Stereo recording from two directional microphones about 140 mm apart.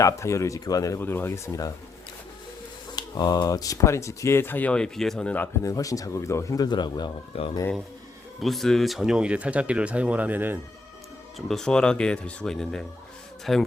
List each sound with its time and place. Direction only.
0.0 s speech: 20° left (ahead or behind)
2.9 s speech: 30° left (ahead or behind); by 5.5 s 10° left (ahead or behind)
5.6 s speech: 25° left (ahead or behind)
8.4 s speech: centre (ahead or behind)
11.3 s speech: centre (ahead or behind)